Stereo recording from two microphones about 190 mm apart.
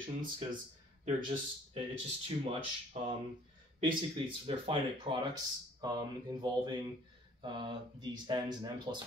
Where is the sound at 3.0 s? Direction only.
35° right (ahead or behind).